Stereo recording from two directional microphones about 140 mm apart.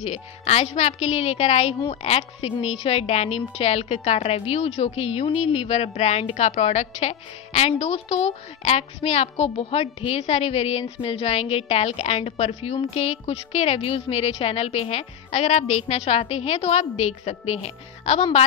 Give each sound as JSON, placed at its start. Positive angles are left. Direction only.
{"t": 0.0, "sound": "a woman's voice", "side_deg": 50}